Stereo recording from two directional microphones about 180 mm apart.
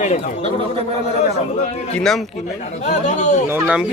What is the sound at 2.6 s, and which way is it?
Speech, 40° left (ahead or behind).